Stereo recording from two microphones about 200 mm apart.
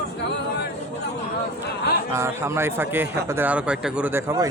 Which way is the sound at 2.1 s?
15° right (ahead or behind).